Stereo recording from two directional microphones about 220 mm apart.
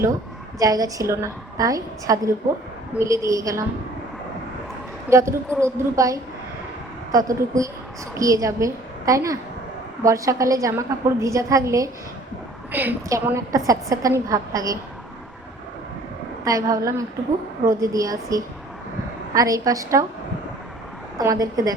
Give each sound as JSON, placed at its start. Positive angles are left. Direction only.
{"t": 0.6, "sound": "a woman's voice", "side_deg": -15}
{"t": 5.0, "sound": "a woman's voice", "side_deg": -10}
{"t": 16.4, "sound": "a woman's voice", "side_deg": -15}
{"t": 21.2, "sound": "a woman's voice", "side_deg": -15}